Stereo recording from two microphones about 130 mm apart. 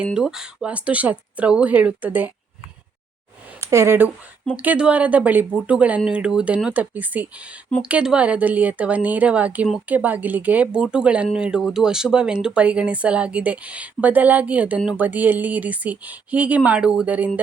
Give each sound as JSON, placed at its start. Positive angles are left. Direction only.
{"t": 0.0, "sound": "speech", "side_deg": -5}
{"t": 3.6, "sound": "speech", "side_deg": -20}